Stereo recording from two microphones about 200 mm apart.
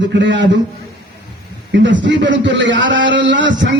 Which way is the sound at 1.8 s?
65° right (ahead or behind).